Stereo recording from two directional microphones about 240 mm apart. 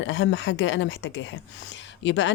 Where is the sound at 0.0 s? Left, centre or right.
Left.